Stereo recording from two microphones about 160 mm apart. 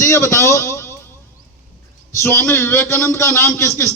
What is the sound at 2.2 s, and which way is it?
A man's voice, 15° left (ahead or behind).